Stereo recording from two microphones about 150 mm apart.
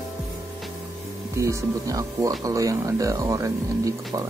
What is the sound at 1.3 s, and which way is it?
Speech, 20° right (ahead or behind).